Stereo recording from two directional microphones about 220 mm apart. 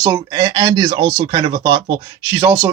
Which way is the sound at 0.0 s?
15° right (ahead or behind).